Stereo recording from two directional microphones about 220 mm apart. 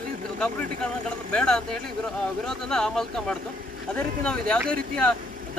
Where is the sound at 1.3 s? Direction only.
5° left (ahead or behind).